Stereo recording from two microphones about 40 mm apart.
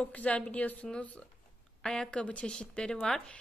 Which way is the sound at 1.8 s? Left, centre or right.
Centre.